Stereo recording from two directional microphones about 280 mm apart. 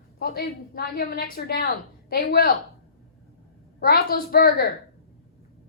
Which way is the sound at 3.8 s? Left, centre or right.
Left.